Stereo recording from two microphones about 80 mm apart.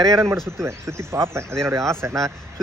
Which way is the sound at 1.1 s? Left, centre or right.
Right.